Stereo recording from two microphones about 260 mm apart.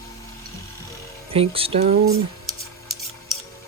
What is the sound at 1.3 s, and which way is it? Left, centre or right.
Speech, right.